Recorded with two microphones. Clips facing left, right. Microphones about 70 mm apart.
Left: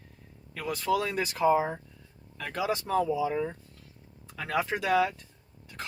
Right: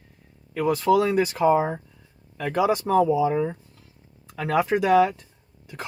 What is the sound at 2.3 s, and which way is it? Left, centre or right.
Speech, centre.